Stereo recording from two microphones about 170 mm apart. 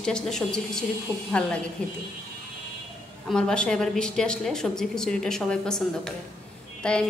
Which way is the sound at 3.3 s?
5° left (ahead or behind).